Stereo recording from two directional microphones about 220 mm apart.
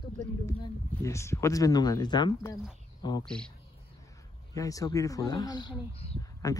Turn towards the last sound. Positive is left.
turn(degrees=15)  # may be behind; listen again after turning